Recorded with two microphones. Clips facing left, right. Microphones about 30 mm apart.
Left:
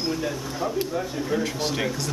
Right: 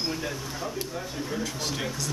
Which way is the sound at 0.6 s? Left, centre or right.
Centre.